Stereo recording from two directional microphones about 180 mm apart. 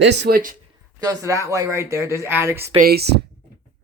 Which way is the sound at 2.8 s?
60° right (ahead or behind).